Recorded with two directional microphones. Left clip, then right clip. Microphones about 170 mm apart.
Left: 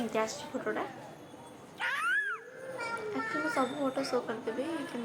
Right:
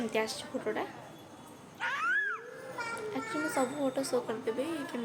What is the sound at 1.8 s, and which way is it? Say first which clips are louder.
Cat: even; 20° left (ahead or behind).